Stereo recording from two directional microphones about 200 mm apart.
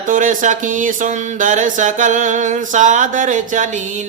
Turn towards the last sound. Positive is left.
turn(degrees=-40)  # may be behind; listen again after turning